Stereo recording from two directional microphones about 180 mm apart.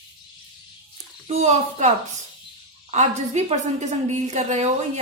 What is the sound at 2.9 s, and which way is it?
A woman's voice, 40° right (ahead or behind).